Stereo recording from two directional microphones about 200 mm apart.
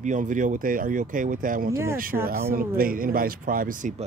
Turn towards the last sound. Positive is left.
turn(degrees=-45)  # may be behind; listen again after turning